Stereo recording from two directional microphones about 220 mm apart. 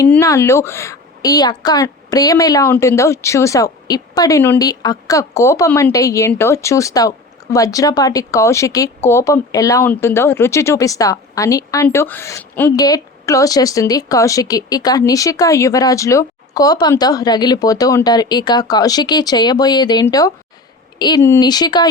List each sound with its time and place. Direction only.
0.0 s speech: 10° left (ahead or behind)